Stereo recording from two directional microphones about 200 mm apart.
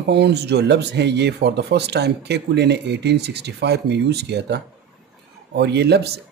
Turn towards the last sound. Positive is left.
turn(degrees=-55)  # may be behind; listen again after turning